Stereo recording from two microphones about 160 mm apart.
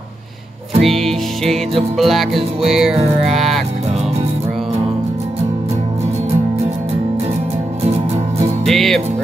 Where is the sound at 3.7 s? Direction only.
40° right (ahead or behind).